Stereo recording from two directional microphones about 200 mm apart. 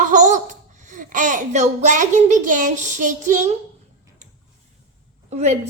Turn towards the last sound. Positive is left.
turn(degrees=-35)  # may be behind; listen again after turning